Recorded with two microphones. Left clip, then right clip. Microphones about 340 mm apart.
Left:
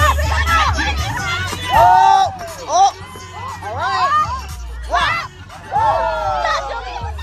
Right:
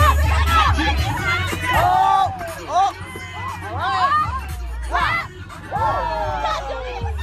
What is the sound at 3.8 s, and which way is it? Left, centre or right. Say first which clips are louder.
Hubbub: left 2 dB; left.